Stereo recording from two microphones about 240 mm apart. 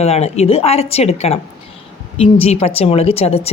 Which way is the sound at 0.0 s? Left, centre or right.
Left.